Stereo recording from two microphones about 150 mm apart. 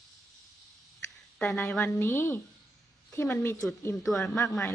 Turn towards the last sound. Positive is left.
turn(degrees=10)  # may be behind; listen again after turning